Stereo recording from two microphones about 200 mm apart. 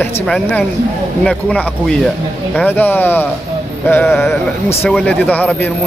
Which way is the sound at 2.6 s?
10° left (ahead or behind).